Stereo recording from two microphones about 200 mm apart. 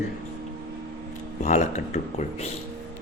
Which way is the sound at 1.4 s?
35° left (ahead or behind).